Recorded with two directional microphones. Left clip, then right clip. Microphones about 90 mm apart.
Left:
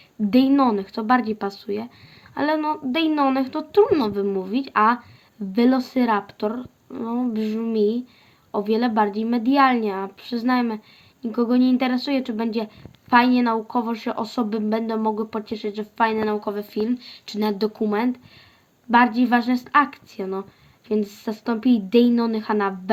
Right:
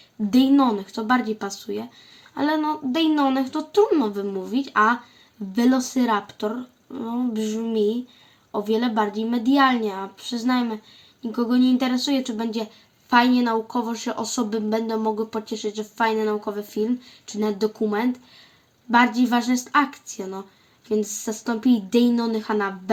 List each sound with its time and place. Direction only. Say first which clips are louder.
0.5 s speech: even; 35° left (ahead or behind)
2.3 s speech: left 1 dB; 20° left (ahead or behind)
10.2 s speech: left 1 dB; 35° left (ahead or behind)